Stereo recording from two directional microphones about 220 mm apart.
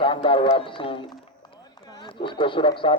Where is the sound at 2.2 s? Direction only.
20° left (ahead or behind).